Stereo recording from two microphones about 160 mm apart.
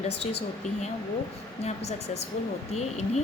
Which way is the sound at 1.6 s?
40° left (ahead or behind).